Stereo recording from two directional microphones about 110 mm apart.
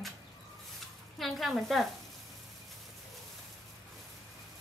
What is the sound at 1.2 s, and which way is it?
Speech, centre (ahead or behind).